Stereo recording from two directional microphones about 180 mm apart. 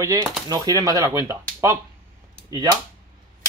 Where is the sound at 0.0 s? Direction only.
20° right (ahead or behind).